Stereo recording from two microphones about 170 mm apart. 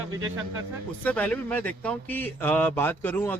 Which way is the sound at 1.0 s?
10° left (ahead or behind).